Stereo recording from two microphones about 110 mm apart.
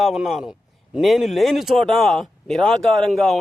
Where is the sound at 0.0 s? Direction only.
5° right (ahead or behind).